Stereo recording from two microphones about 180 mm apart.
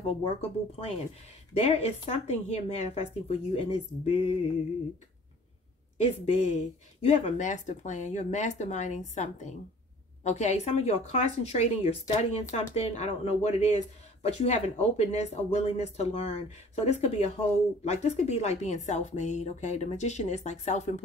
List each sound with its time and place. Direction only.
0.0 s speech: 35° left (ahead or behind)
6.5 s speech: 40° left (ahead or behind)